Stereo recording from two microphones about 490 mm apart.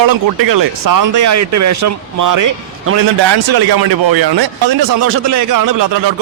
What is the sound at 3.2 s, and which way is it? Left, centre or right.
A man's voice, right.